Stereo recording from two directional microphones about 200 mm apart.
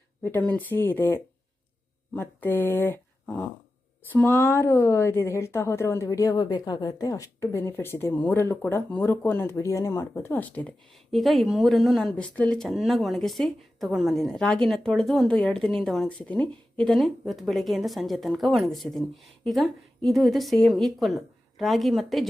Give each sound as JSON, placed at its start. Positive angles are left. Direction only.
{"t": 0.2, "sound": "speech", "side_deg": 10}